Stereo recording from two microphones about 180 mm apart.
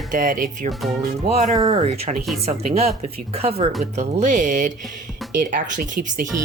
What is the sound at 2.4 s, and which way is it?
Speech, 35° right (ahead or behind).